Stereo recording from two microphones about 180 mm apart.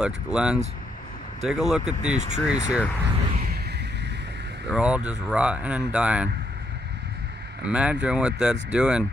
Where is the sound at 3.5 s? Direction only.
65° right (ahead or behind).